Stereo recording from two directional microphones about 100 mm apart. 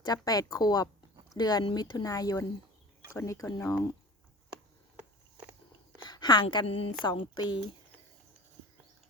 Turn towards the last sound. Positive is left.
turn(degrees=50)  # may be behind; listen again after turning